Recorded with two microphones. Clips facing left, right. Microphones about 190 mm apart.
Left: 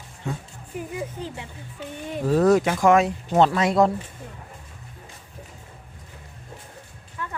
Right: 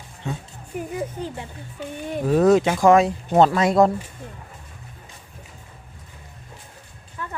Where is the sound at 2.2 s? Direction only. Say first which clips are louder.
Right 2 dB; 15° right (ahead or behind); by 3.9 s 45° right (ahead or behind).